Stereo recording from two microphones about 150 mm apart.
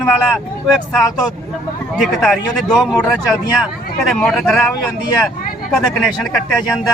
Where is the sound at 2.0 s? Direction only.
Centre (ahead or behind).